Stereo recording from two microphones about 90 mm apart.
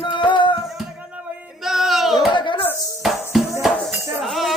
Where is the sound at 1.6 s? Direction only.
5° right (ahead or behind).